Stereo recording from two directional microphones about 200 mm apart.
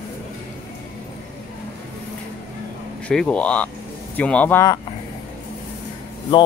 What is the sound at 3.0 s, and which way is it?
Speech, 5° left (ahead or behind).